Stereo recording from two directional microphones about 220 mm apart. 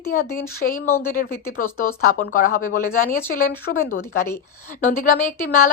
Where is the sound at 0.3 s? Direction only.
40° left (ahead or behind).